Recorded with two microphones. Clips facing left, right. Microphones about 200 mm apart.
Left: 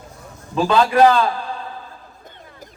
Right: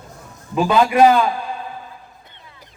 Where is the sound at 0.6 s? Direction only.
15° right (ahead or behind).